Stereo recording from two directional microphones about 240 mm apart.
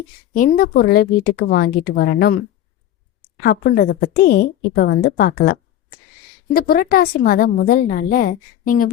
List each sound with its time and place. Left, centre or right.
0.3 s a woman's voice: left
3.4 s a woman's voice: left